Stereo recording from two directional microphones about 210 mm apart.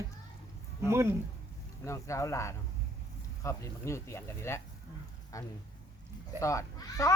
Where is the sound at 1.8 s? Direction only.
15° left (ahead or behind).